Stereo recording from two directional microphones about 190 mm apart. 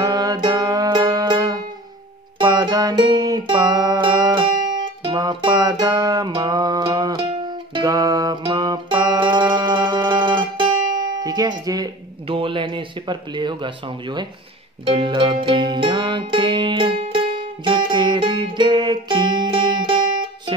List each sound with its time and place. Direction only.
0.0 s music: 20° right (ahead or behind)
11.2 s speech: 20° right (ahead or behind)
14.9 s music: 25° right (ahead or behind)